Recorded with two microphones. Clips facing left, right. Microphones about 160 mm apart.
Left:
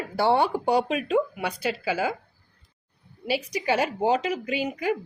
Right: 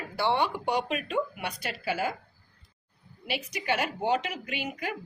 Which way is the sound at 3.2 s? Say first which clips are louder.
Left 5 dB; 35° left (ahead or behind).